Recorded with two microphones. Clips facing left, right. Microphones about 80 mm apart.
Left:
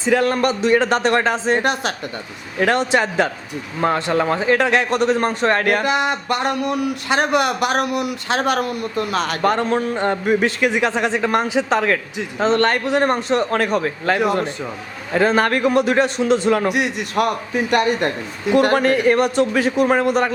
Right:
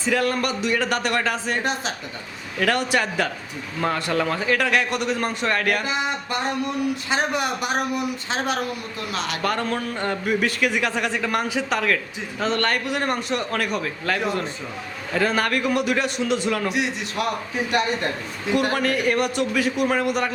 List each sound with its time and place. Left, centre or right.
0.0 s a man's voice: left
1.6 s a man's voice: left
2.6 s a man's voice: left
5.8 s speech: left
9.0 s speech: left
9.4 s a man's voice: left
16.6 s a man's voice: left
18.8 s a man's voice: left